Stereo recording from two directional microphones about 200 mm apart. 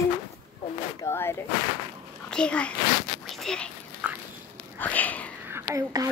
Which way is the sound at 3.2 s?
Centre (ahead or behind).